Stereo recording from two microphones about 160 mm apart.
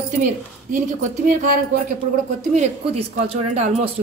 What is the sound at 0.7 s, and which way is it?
Speech, 55° right (ahead or behind).